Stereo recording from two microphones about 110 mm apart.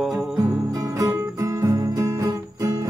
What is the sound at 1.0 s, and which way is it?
Music, 30° right (ahead or behind).